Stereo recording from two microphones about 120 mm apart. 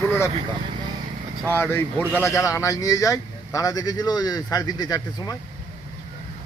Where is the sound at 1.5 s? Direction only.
20° left (ahead or behind); by 5.3 s 35° left (ahead or behind).